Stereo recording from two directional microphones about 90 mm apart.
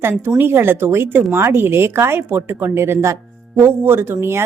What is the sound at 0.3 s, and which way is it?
Speech, 25° right (ahead or behind).